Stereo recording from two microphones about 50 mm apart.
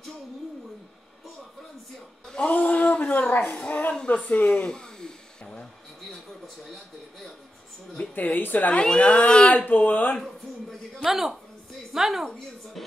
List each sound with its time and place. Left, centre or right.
2.4 s speech: left
3.5 s speech: left
4.6 s a sound: centre
6.4 s speech: centre
8.1 s a woman's voice: left
8.7 s speech: left
11.1 s a woman's voice: centre